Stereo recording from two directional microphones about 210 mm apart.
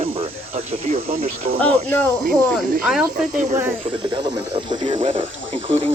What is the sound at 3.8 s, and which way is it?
Speech, 25° right (ahead or behind).